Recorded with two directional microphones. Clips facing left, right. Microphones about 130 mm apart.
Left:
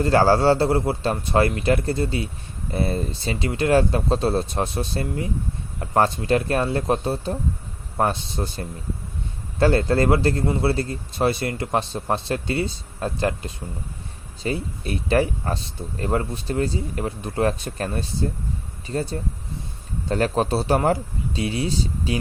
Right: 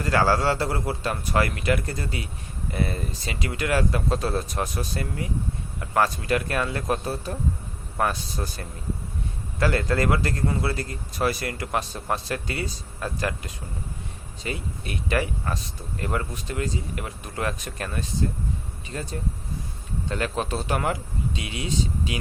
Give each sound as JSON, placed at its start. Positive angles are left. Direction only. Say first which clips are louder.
{"t": 0.0, "sound": "a man's voice", "louder": "left 5 dB", "side_deg": 30}